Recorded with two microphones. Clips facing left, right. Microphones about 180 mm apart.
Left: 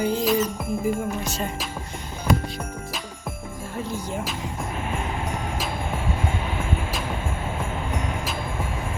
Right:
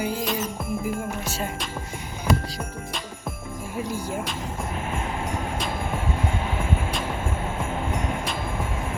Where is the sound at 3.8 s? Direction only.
10° right (ahead or behind).